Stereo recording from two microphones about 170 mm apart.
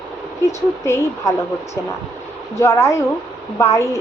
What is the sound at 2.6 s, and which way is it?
Speech, 15° left (ahead or behind).